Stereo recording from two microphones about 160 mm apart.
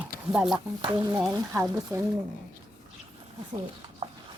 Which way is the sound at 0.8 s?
25° right (ahead or behind).